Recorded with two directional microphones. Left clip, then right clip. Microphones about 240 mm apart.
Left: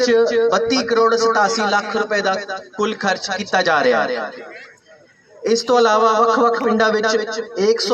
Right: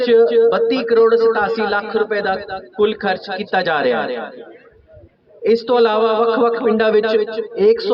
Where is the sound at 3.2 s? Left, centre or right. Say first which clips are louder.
Left 1 dB; right.